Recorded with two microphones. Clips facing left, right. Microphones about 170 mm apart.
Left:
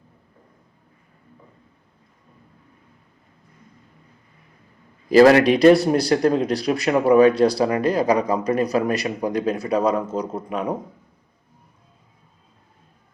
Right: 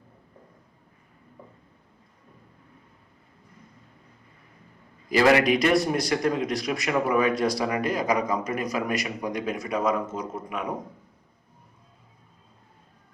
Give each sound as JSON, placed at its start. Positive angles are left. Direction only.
{"t": 5.0, "sound": "speech", "side_deg": 35}